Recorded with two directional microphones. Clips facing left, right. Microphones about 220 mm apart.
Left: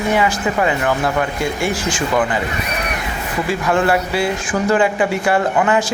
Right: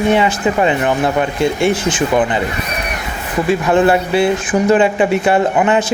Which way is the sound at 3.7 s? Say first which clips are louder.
Right 4 dB; 20° right (ahead or behind).